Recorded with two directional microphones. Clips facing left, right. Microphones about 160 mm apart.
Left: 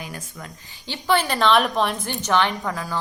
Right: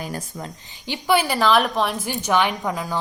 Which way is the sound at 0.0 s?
40° right (ahead or behind).